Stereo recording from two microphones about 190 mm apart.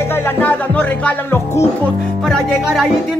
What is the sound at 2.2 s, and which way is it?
Music, centre (ahead or behind).